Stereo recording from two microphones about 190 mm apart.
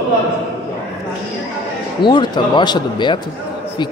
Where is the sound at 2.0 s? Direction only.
25° left (ahead or behind).